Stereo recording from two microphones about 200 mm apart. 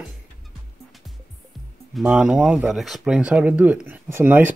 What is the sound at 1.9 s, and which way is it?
Speech, 5° right (ahead or behind).